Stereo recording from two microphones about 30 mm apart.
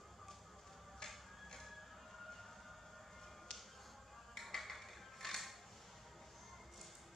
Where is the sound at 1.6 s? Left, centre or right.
Centre.